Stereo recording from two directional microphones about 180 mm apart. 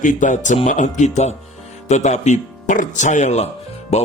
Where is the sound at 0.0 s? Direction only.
45° left (ahead or behind).